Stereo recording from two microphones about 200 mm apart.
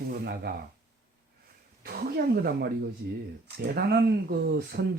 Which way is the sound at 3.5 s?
55° right (ahead or behind).